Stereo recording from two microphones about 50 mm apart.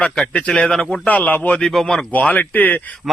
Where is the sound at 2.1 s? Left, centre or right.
Left.